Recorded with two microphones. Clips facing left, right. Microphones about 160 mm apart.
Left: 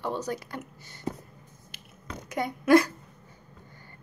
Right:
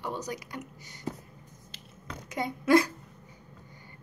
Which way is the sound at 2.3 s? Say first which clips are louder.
Left 3 dB; 25° right (ahead or behind).